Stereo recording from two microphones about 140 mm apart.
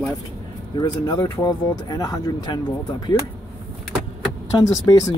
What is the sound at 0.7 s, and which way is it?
Speech, 30° left (ahead or behind).